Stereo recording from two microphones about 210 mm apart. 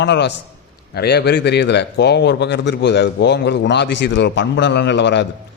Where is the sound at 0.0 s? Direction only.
55° left (ahead or behind).